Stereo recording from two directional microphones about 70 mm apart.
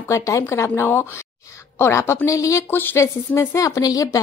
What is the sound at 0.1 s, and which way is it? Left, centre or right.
A woman's voice, left.